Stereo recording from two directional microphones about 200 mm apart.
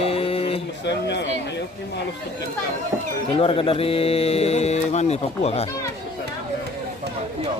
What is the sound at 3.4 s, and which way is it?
Speech, 30° left (ahead or behind).